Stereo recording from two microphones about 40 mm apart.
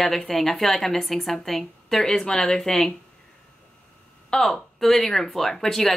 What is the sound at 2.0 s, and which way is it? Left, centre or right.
Speech, centre.